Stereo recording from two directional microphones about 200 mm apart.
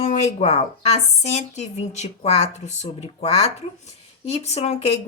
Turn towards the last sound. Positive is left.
turn(degrees=30)  # may be behind; listen again after turning